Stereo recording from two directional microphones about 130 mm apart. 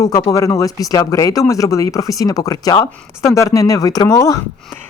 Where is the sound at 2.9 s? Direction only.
15° left (ahead or behind).